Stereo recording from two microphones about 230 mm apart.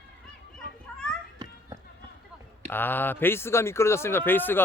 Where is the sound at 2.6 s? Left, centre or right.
Centre.